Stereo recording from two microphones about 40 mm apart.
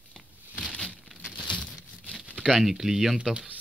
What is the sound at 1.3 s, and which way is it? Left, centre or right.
Crumpling, left.